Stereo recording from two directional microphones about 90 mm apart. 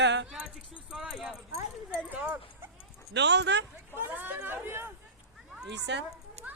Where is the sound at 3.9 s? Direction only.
25° right (ahead or behind).